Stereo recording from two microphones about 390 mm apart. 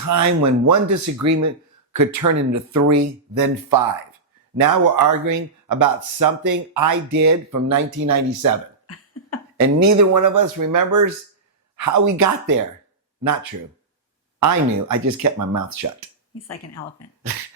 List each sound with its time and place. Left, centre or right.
0.0 s speech: right
9.6 s speech: right
16.3 s speech: left